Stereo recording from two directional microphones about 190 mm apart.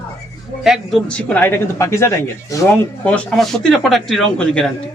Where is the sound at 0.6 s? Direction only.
Centre (ahead or behind).